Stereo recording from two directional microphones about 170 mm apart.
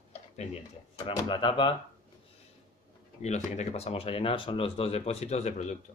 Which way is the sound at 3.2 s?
40° left (ahead or behind).